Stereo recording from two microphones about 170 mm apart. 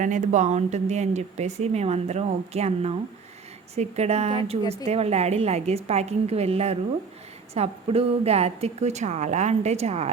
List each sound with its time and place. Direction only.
0.0 s speech: 45° right (ahead or behind)